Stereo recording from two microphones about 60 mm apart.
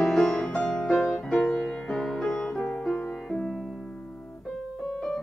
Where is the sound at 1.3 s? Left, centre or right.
Left.